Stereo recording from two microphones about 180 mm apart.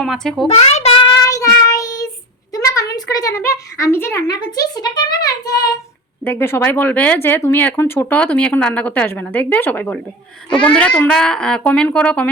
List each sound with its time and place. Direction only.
0.0 s a child's voice: centre (ahead or behind)
0.4 s child singing: 35° left (ahead or behind); by 2.0 s 20° left (ahead or behind)
2.5 s a sound: 20° left (ahead or behind)
6.2 s a child's voice: 10° left (ahead or behind)